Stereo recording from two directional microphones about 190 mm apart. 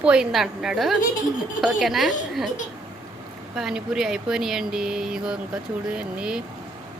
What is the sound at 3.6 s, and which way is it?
Speech, centre (ahead or behind).